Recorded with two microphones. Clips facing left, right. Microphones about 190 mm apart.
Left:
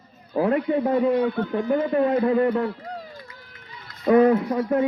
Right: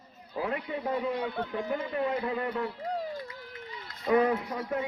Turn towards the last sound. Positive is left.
turn(degrees=50)  # may be behind; listen again after turning